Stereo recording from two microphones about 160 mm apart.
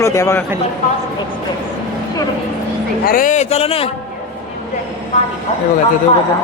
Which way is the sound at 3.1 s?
55° left (ahead or behind).